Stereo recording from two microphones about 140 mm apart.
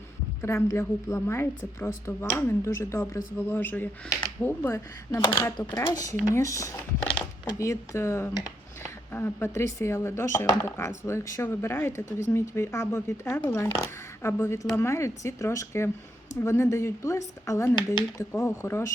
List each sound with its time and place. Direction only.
0.4 s speech: 20° left (ahead or behind)